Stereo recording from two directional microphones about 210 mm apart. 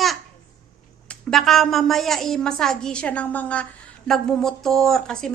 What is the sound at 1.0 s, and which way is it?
Speech, centre (ahead or behind).